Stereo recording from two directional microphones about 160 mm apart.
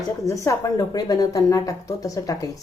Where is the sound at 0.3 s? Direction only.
20° left (ahead or behind).